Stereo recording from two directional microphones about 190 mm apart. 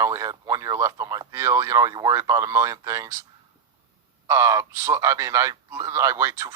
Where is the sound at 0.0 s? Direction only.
15° right (ahead or behind).